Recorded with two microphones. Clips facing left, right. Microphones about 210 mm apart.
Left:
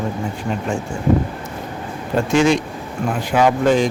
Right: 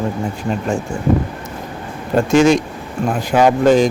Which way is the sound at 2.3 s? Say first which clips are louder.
Right 4 dB; 45° right (ahead or behind).